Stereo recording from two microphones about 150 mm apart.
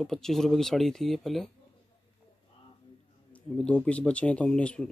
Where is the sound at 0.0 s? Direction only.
Centre (ahead or behind).